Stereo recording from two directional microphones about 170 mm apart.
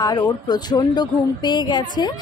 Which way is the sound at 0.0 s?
25° left (ahead or behind).